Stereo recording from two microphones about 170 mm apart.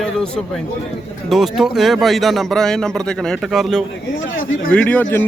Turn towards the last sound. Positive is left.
turn(degrees=10)  # may be behind; listen again after turning